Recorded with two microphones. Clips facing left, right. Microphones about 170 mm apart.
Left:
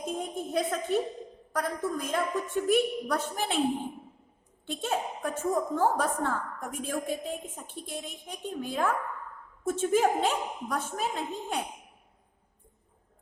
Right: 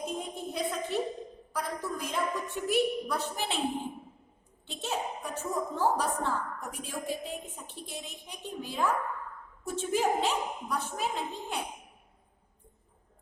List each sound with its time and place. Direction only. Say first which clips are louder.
0.2 s a sound: left 4 dB; 50° left (ahead or behind)
1.5 s a woman's voice: left 4 dB; 50° left (ahead or behind)
4.6 s a woman's voice: left 3 dB; 50° left (ahead or behind)